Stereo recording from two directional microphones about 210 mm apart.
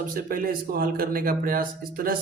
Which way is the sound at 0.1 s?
40° right (ahead or behind).